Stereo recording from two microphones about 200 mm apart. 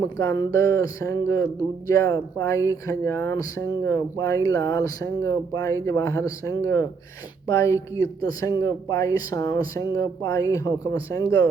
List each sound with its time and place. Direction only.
0.2 s speech: 15° left (ahead or behind)